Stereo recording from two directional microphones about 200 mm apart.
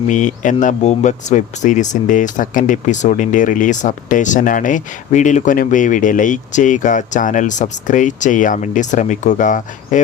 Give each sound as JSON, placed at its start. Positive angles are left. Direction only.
{"t": 0.1, "sound": "speech", "side_deg": 40}